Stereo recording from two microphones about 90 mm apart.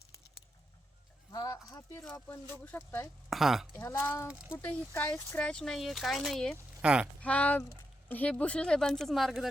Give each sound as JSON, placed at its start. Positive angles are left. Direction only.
{"t": 1.3, "sound": "a sound", "side_deg": 45}
{"t": 1.7, "sound": "speech", "side_deg": 35}
{"t": 2.2, "sound": "speech", "side_deg": 20}
{"t": 3.2, "sound": "speech", "side_deg": -5}
{"t": 4.0, "sound": "speech", "side_deg": 25}
{"t": 4.3, "sound": "speech", "side_deg": -10}
{"t": 4.6, "sound": "speech", "side_deg": 15}
{"t": 6.8, "sound": "speech", "side_deg": -10}
{"t": 7.2, "sound": "speech", "side_deg": 15}